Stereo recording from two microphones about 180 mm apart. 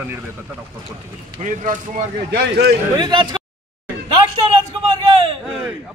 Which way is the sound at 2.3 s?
65° right (ahead or behind).